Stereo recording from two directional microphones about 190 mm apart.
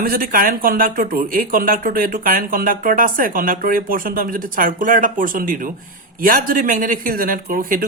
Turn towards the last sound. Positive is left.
turn(degrees=-45)  # may be behind; listen again after turning